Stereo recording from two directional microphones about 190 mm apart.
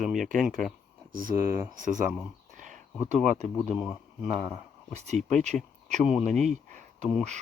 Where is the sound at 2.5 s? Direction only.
40° right (ahead or behind).